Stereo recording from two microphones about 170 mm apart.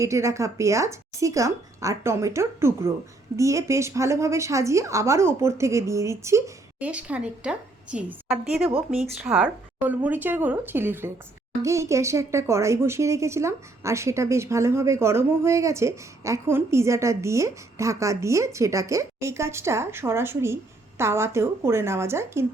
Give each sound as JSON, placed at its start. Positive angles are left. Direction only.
{"t": 0.0, "sound": "speech", "side_deg": -15}